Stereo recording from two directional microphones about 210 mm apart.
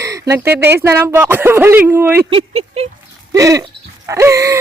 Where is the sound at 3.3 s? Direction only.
15° right (ahead or behind).